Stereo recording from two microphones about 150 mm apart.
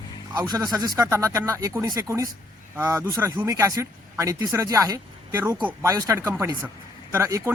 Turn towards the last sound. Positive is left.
turn(degrees=-20)  # may be behind; listen again after turning